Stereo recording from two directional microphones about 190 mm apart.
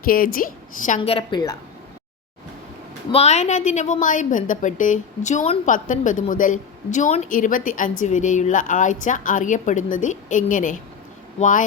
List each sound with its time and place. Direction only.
0.0 s a woman's voice: 50° left (ahead or behind); by 1.5 s 20° left (ahead or behind)
3.1 s a woman's voice: 35° left (ahead or behind)